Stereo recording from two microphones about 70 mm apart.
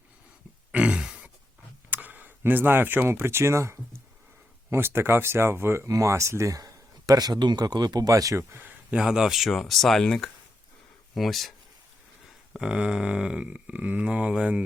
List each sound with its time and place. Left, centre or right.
0.7 s grunt: centre
1.9 s speech: right
8.1 s speech: right
8.5 s a sound: right
9.0 s speech: centre
11.1 s speech: centre
12.5 s speech: centre